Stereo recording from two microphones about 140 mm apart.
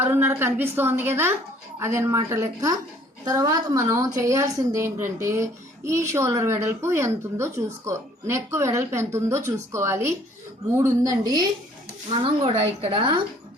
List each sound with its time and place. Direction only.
0.0 s a woman's voice: 15° right (ahead or behind); by 13.2 s 35° right (ahead or behind)